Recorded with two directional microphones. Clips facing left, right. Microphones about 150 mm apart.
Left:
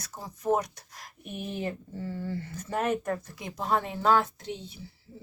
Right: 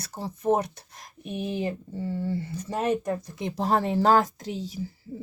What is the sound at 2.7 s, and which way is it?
Speech, 35° right (ahead or behind).